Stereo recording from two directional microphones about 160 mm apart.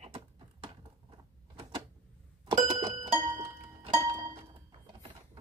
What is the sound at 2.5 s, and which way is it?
Music, 25° right (ahead or behind).